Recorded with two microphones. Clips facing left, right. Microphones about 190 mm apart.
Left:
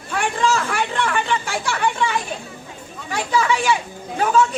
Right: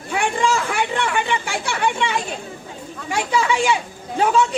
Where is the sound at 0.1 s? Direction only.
15° right (ahead or behind).